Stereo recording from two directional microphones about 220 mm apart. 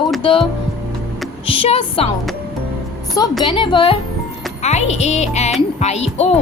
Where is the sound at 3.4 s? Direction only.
20° left (ahead or behind).